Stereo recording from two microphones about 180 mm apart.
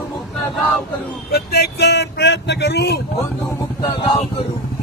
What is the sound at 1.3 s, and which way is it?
Speech, 60° left (ahead or behind).